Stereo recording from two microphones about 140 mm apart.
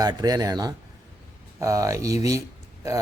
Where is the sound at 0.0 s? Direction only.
25° right (ahead or behind).